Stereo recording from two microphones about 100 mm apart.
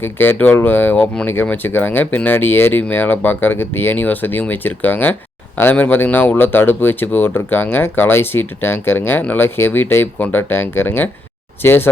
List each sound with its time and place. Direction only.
0.0 s speech: 20° left (ahead or behind)